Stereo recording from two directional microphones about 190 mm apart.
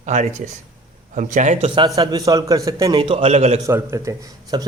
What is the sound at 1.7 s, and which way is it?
A man's voice, 20° right (ahead or behind).